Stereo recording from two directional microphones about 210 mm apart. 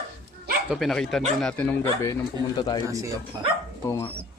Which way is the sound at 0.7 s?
Centre (ahead or behind).